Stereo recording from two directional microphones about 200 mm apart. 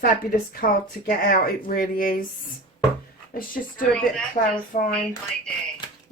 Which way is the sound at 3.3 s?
45° left (ahead or behind).